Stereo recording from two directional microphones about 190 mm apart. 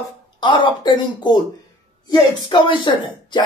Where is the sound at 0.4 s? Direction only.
25° left (ahead or behind).